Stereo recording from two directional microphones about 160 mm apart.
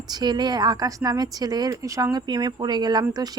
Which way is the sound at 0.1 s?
25° right (ahead or behind).